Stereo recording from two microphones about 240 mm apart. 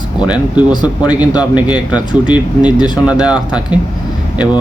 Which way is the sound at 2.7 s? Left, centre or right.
Centre.